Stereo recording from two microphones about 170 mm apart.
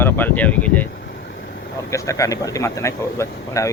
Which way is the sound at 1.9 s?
20° left (ahead or behind).